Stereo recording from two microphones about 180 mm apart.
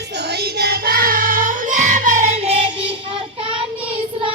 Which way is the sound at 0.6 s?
60° right (ahead or behind).